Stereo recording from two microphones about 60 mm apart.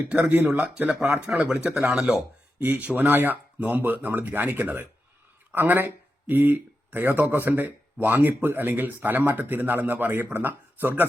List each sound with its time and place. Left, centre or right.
0.2 s speech: right
1.3 s speech: centre
2.6 s speech: right